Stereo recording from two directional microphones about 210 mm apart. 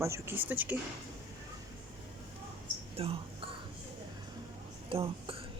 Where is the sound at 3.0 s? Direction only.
25° right (ahead or behind).